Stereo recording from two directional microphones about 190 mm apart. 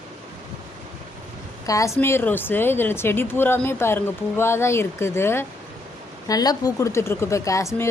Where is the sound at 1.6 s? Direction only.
15° left (ahead or behind).